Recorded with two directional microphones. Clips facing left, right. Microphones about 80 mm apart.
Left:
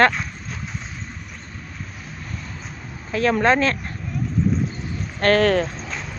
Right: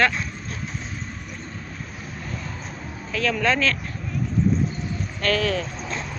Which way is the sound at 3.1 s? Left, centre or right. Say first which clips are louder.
Left 5 dB; left.